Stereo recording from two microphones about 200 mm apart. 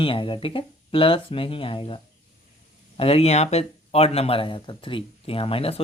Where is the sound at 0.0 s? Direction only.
25° left (ahead or behind).